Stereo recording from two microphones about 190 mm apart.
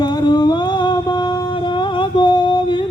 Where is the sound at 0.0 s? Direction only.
20° left (ahead or behind).